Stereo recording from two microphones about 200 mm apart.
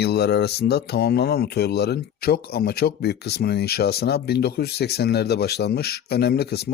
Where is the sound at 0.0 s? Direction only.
55° left (ahead or behind).